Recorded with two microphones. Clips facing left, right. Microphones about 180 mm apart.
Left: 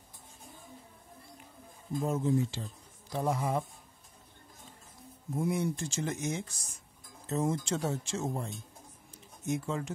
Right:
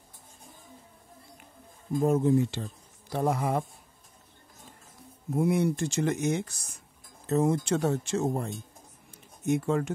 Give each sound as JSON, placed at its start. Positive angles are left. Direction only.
{"t": 2.0, "sound": "speech", "side_deg": -55}
{"t": 5.3, "sound": "speech", "side_deg": -65}